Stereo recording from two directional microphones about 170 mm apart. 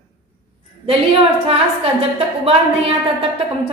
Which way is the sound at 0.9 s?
35° right (ahead or behind).